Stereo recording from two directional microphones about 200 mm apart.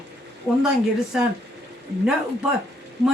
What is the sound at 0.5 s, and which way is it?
Speech, 5° right (ahead or behind).